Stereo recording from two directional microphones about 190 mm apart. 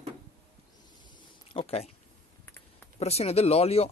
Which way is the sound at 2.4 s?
10° left (ahead or behind).